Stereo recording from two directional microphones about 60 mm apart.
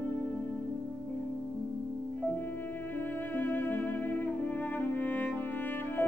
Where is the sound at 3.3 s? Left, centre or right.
Left.